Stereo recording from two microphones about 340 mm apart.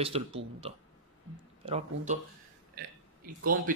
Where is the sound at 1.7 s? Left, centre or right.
Centre.